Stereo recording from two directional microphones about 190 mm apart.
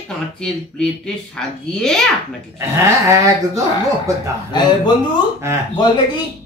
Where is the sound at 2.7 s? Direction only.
15° right (ahead or behind).